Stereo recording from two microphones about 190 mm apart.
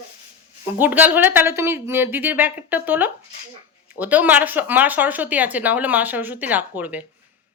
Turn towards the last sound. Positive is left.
turn(degrees=-10)  # may be behind; listen again after turning